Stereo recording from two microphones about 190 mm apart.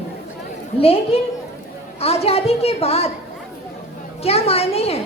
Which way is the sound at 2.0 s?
30° left (ahead or behind).